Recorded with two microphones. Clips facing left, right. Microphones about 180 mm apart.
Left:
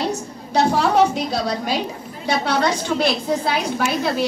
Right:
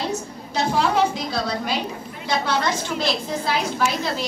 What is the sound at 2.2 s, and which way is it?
A woman's voice, 65° left (ahead or behind).